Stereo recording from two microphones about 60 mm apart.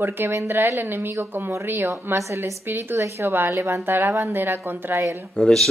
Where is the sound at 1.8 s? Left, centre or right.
Right.